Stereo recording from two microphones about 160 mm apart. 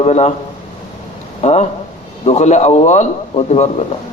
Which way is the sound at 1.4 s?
45° left (ahead or behind).